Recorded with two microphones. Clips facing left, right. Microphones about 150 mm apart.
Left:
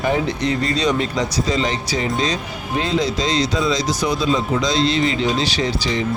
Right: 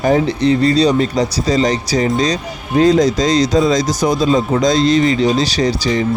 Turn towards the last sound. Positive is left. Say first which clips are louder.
# right 5 dB
turn(degrees=-40)  # may be behind; listen again after turning